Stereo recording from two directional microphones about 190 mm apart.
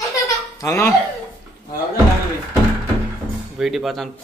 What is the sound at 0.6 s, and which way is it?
Speech, 15° left (ahead or behind).